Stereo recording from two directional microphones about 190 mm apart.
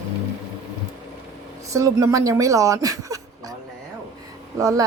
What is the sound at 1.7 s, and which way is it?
Speech, 15° right (ahead or behind).